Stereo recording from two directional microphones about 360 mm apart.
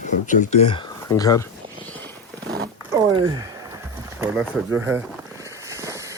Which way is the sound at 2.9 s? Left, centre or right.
Centre.